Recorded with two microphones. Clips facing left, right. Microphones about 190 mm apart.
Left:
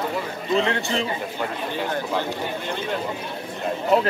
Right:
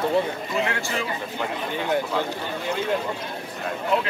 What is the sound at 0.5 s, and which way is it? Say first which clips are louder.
Speech: left 6 dB; 30° left (ahead or behind).